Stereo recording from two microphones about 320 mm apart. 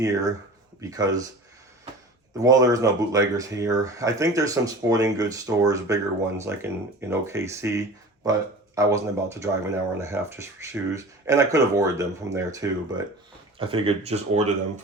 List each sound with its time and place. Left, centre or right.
0.0 s speech: centre
2.4 s speech: centre